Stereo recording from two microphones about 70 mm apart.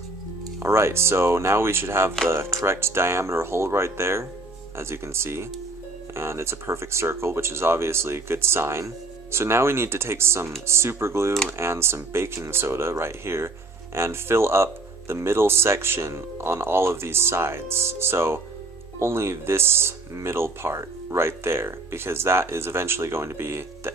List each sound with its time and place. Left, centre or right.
0.6 s speech: right